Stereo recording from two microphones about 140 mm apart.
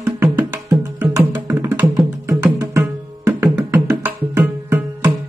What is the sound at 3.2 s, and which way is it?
Music, 20° right (ahead or behind).